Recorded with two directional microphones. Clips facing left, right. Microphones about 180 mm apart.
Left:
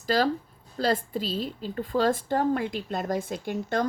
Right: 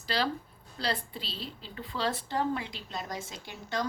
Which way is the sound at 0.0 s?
45° left (ahead or behind).